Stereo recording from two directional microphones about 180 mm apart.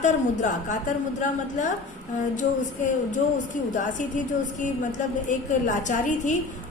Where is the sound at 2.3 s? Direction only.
45° left (ahead or behind).